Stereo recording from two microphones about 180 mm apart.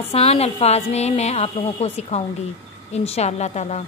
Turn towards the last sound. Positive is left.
turn(degrees=40)  # may be behind; listen again after turning